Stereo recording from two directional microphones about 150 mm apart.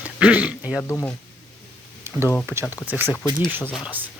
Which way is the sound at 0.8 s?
15° left (ahead or behind).